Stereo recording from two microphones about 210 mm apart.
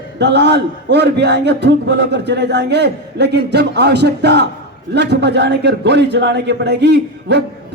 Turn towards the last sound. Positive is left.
turn(degrees=-55)  # may be behind; listen again after turning